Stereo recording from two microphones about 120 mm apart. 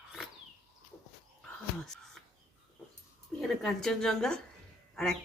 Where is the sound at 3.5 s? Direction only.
Centre (ahead or behind).